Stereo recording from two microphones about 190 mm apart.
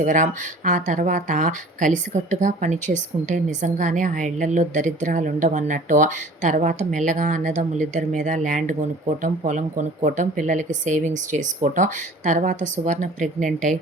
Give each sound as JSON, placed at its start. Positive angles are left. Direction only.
{"t": 0.0, "sound": "speech", "side_deg": -40}